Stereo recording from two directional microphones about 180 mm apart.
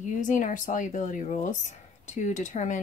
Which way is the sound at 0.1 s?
45° left (ahead or behind).